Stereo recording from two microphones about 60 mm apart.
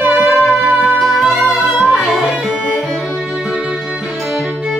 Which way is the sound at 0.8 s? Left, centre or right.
Centre.